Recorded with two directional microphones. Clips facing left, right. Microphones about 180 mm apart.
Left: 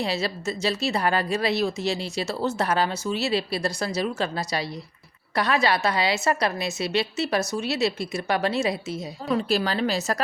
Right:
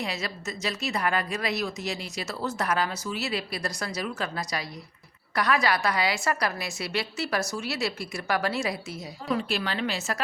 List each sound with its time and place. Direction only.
0.0 s speech: 30° left (ahead or behind)
9.5 s a woman's voice: 35° left (ahead or behind)